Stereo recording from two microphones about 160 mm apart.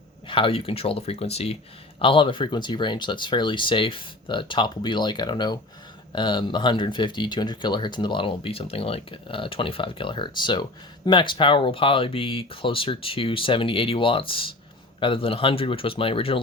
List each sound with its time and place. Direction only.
0.3 s speech: 35° left (ahead or behind)